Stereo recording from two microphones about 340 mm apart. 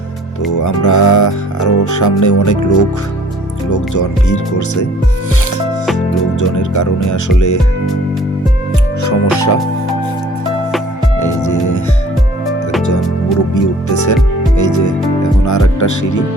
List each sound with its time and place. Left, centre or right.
0.6 s speech: left
3.7 s speech: left
6.4 s speech: left
9.0 s speech: left
11.2 s music: left
13.5 s speech: left
14.5 s music: left
15.4 s speech: left